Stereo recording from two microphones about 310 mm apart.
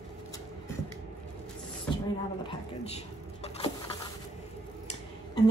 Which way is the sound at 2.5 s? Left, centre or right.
Centre.